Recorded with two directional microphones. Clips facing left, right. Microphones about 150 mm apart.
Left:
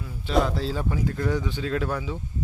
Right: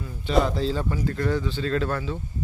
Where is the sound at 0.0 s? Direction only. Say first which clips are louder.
Right 1 dB; centre (ahead or behind).